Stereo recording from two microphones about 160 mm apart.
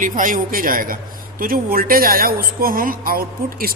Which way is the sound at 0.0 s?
55° right (ahead or behind).